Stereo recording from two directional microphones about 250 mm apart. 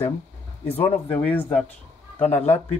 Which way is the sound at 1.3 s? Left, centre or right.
Centre.